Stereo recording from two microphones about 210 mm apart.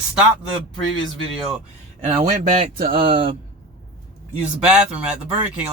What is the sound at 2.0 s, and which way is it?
Speech, 35° right (ahead or behind).